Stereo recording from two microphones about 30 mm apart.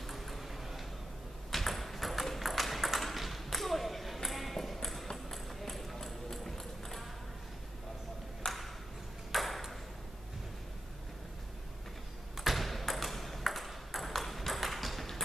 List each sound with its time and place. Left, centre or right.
0.0 s a sound: centre
3.0 s ping: centre
5.1 s clip-clop: centre
8.4 s ping: left
9.3 s ping: centre
12.4 s ping: centre